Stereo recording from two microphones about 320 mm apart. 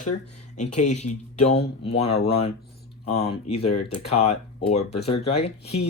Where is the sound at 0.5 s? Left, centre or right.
Left.